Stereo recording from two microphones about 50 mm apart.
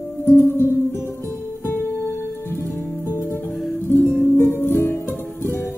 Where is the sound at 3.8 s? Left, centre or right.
Left.